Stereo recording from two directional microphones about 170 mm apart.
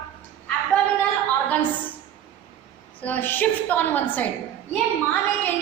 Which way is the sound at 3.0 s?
10° left (ahead or behind).